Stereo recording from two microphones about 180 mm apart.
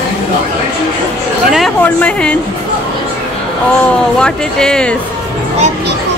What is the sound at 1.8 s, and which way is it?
Speech, 5° left (ahead or behind).